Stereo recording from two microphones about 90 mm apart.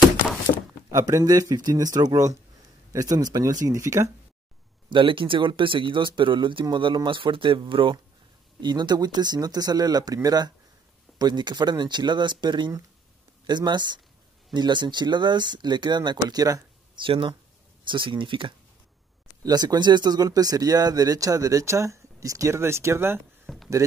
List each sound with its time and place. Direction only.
0.9 s speech: 35° right (ahead or behind)
4.8 s speech: 65° right (ahead or behind)
8.5 s speech: 55° right (ahead or behind)
16.9 s speech: 70° right (ahead or behind)
19.4 s speech: 50° right (ahead or behind); by 23.2 s 25° right (ahead or behind)
23.4 s a sound: centre (ahead or behind)